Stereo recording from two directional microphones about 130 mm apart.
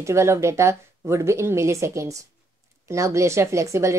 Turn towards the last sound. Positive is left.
turn(degrees=-20)  # may be behind; listen again after turning